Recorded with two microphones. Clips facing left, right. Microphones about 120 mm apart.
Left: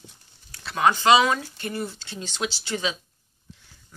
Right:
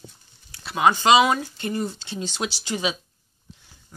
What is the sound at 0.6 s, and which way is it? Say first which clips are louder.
Speech: right 1 dB; 15° right (ahead or behind).